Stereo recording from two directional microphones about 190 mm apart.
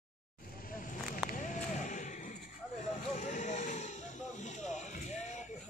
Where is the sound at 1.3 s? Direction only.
40° left (ahead or behind).